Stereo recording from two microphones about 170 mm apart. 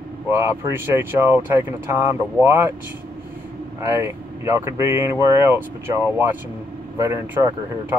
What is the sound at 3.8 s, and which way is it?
Speech, 15° right (ahead or behind).